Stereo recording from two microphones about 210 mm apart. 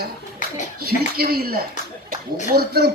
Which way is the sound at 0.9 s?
45° right (ahead or behind).